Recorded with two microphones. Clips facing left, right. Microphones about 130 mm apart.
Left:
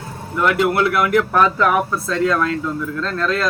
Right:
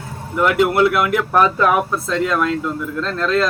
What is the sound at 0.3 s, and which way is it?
Speech, 15° right (ahead or behind).